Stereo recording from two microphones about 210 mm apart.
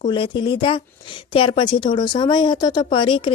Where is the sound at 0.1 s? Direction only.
20° left (ahead or behind).